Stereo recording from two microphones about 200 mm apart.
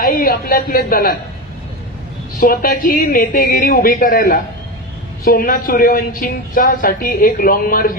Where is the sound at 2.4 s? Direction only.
45° left (ahead or behind).